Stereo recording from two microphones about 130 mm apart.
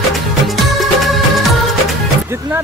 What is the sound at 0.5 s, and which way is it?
Music, centre (ahead or behind).